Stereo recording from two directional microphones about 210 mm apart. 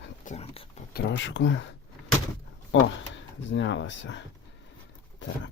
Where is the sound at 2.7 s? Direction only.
60° left (ahead or behind).